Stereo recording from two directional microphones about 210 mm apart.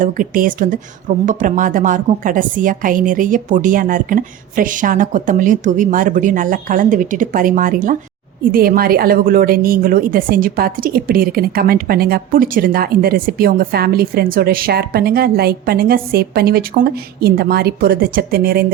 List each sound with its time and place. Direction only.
0.0 s a woman's voice: 40° right (ahead or behind)